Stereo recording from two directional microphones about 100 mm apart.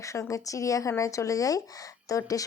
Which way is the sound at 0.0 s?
30° left (ahead or behind).